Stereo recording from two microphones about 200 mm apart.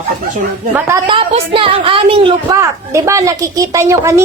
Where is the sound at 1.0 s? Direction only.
25° right (ahead or behind).